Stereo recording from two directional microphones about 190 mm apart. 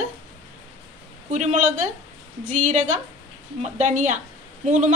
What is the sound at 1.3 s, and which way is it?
A woman's voice, 40° right (ahead or behind).